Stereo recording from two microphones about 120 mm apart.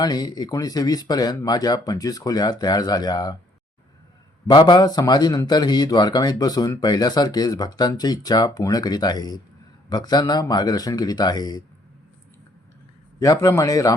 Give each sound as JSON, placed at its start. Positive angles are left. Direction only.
{"t": 0.0, "sound": "speech", "side_deg": 35}
{"t": 4.4, "sound": "speech", "side_deg": 35}
{"t": 13.1, "sound": "speech", "side_deg": 30}